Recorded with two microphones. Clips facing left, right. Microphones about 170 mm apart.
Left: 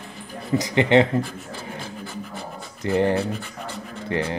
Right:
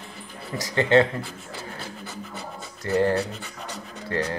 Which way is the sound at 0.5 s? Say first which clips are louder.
Left 2 dB; 15° left (ahead or behind).